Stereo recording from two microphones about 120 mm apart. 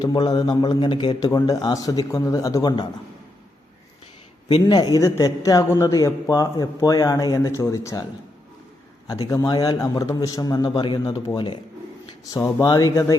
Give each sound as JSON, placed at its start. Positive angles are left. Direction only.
{"t": 0.0, "sound": "a man's voice", "side_deg": 35}
{"t": 4.7, "sound": "speech", "side_deg": 35}
{"t": 9.0, "sound": "a man's voice", "side_deg": 30}
{"t": 11.3, "sound": "a man's voice", "side_deg": 40}
{"t": 12.2, "sound": "speech", "side_deg": 30}